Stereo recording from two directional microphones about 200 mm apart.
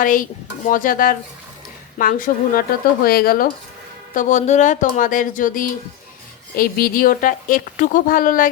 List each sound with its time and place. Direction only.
0.0 s a woman's voice: 40° left (ahead or behind)